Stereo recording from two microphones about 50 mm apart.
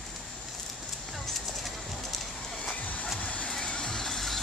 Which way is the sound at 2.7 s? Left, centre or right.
Left.